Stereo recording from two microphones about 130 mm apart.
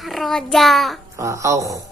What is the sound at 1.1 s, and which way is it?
Speech, 25° right (ahead or behind).